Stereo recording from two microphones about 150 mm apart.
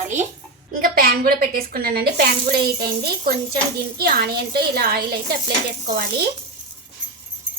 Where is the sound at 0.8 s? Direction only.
80° right.